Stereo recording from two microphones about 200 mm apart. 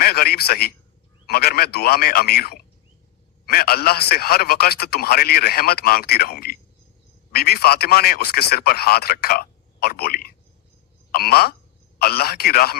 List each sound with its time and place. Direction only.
0.0 s a man's voice: 50° left (ahead or behind)